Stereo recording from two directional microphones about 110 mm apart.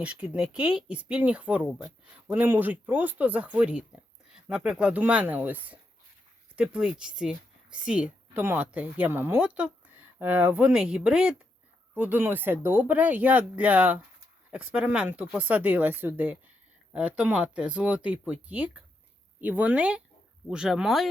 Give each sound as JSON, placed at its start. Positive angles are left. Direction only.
{"t": 0.0, "sound": "speech", "side_deg": -10}